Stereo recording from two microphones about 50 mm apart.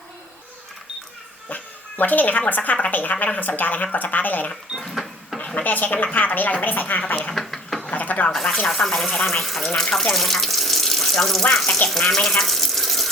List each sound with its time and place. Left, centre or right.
1.5 s a sound: left
2.5 s speech: left
4.8 s printer: centre
5.6 s speech: left
7.3 s a sound: centre
7.8 s speech: left
8.6 s speech: centre
9.7 s speech: centre
11.9 s water tap: centre